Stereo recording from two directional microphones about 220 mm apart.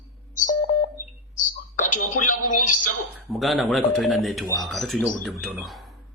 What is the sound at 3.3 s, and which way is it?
Speech, centre (ahead or behind).